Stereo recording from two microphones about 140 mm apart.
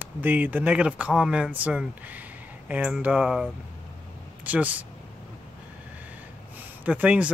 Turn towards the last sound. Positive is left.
turn(degrees=-10)  # may be behind; listen again after turning